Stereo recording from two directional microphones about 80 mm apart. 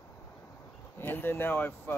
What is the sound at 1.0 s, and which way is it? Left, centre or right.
Speech, left.